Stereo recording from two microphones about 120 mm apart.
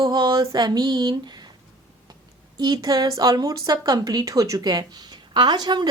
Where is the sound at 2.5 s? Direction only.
35° right (ahead or behind).